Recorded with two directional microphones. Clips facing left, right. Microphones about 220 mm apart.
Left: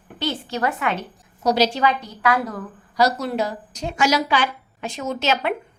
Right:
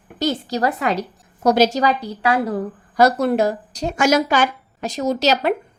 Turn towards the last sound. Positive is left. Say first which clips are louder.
# right 5 dB
turn(degrees=-40)  # may be behind; listen again after turning